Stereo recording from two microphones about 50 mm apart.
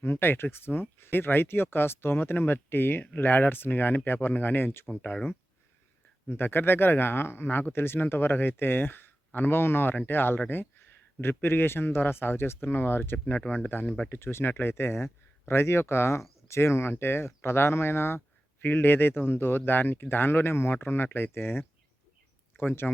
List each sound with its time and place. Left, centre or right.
0.0 s speech: left
6.2 s speech: left
14.1 s speech: left